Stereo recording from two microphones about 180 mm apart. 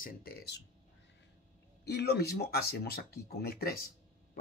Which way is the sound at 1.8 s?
65° left (ahead or behind).